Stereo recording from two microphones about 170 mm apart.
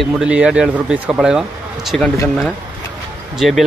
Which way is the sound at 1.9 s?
5° left (ahead or behind).